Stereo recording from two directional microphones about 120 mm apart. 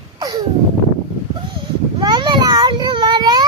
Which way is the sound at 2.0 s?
35° right (ahead or behind).